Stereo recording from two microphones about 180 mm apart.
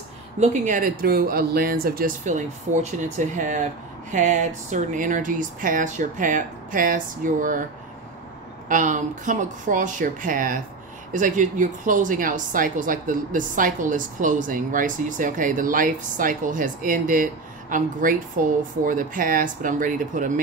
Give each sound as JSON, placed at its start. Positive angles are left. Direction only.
{"t": 0.4, "sound": "a woman's voice", "side_deg": -45}
{"t": 8.6, "sound": "a woman's voice", "side_deg": -45}